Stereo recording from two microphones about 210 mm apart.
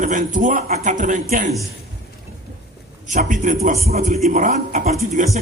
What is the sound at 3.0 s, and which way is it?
A man's voice, 35° right (ahead or behind).